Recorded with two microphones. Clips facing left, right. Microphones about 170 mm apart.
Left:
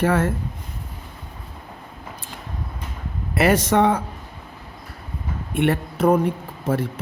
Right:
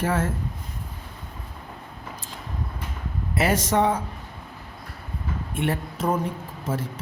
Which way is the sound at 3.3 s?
65° left (ahead or behind).